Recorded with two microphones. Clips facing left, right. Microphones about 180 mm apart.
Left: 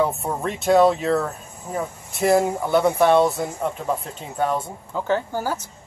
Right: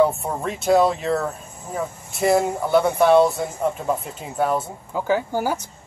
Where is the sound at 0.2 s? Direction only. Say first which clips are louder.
Left 1 dB; centre (ahead or behind).